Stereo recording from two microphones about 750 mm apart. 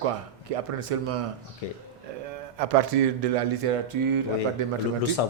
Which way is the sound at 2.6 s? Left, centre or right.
Right.